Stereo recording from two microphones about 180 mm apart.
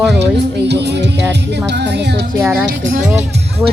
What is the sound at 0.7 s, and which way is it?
Speech, 70° right (ahead or behind).